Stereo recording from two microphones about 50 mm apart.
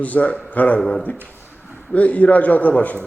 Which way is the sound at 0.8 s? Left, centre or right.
Left.